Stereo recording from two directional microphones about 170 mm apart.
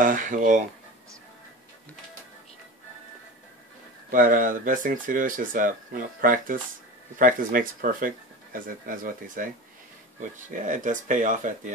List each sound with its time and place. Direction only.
0.0 s speech: 50° right (ahead or behind)
4.1 s speech: 50° right (ahead or behind)
10.6 s speech: 50° right (ahead or behind)